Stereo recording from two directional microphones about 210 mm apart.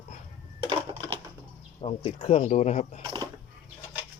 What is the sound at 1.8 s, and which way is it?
Speech, 25° left (ahead or behind).